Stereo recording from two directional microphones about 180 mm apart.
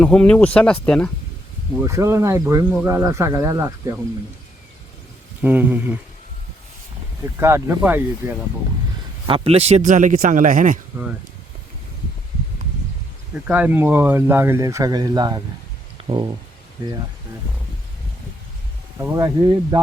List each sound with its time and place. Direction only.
0.0 s speech: 5° left (ahead or behind)
1.8 s speech: 15° right (ahead or behind)
5.4 s speech: 10° right (ahead or behind)
7.3 s speech: 15° right (ahead or behind)
9.2 s speech: 30° right (ahead or behind); by 10.8 s 50° right (ahead or behind)
13.5 s speech: 10° right (ahead or behind); by 16.3 s 25° right (ahead or behind)
18.9 s speech: 15° right (ahead or behind)